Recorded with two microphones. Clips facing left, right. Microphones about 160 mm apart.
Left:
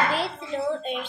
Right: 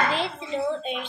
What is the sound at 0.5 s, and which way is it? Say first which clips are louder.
Speech: even; centre (ahead or behind).